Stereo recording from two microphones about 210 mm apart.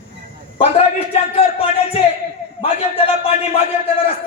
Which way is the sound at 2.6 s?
25° left (ahead or behind).